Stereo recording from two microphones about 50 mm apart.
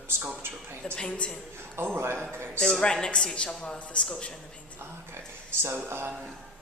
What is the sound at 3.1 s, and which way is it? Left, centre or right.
A man's voice, centre.